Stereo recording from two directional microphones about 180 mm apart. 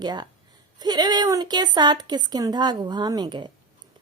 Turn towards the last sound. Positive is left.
turn(degrees=-25)  # may be behind; listen again after turning